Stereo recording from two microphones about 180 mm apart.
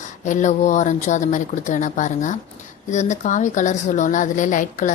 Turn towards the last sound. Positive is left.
turn(degrees=45)  # may be behind; listen again after turning